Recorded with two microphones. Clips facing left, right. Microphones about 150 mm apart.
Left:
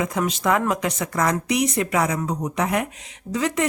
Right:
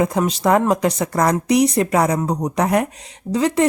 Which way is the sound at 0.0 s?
35° right (ahead or behind).